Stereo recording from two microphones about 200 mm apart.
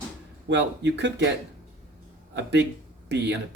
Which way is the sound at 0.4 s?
60° right (ahead or behind).